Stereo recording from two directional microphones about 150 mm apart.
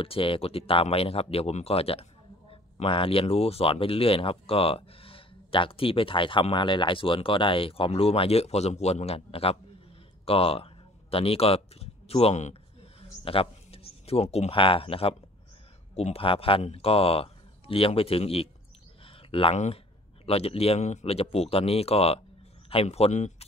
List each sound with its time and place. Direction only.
0.0 s a man's voice: 35° left (ahead or behind)